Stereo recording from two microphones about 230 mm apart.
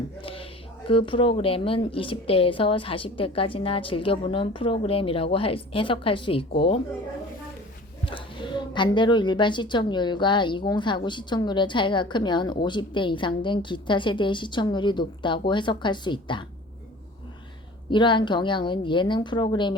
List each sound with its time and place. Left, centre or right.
0.2 s a sound: left
0.9 s a woman's voice: left
8.0 s a woman's voice: left
17.9 s a woman's voice: left